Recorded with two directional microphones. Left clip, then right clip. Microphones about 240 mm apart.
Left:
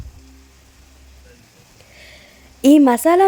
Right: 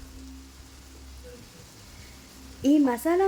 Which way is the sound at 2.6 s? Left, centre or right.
Left.